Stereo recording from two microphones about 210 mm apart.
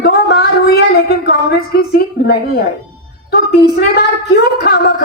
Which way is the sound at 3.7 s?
50° left (ahead or behind).